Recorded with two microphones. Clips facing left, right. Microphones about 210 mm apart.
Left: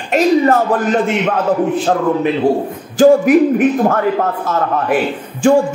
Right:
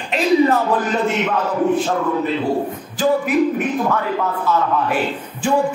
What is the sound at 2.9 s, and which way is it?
Speech, 45° left (ahead or behind).